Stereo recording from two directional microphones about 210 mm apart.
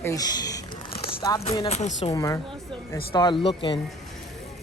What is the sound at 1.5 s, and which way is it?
Speech, 30° left (ahead or behind).